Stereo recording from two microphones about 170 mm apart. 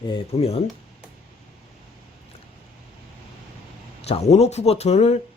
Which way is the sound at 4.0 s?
40° left (ahead or behind).